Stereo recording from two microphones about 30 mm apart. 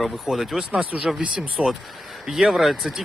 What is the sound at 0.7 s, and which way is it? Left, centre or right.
Speech, right.